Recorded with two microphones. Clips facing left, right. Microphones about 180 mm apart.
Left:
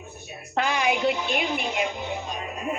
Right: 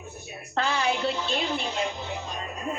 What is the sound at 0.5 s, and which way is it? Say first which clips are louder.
A woman's voice: left 2 dB; 15° left (ahead or behind).